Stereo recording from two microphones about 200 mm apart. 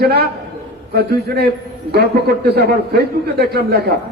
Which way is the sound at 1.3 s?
50° right (ahead or behind).